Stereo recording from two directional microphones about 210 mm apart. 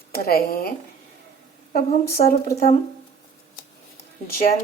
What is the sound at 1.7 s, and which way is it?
Speech, 45° left (ahead or behind).